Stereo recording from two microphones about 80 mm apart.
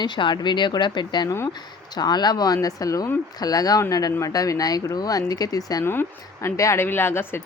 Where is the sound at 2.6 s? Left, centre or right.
Left.